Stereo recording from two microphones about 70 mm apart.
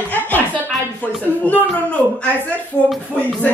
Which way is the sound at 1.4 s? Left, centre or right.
Left.